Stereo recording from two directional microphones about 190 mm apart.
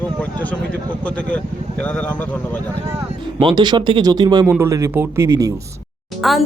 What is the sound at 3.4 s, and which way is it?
Speech, 25° right (ahead or behind).